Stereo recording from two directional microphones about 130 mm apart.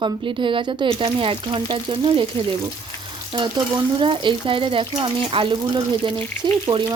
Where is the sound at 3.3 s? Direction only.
35° right (ahead or behind).